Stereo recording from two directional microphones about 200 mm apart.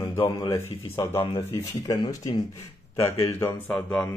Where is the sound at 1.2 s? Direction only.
30° left (ahead or behind).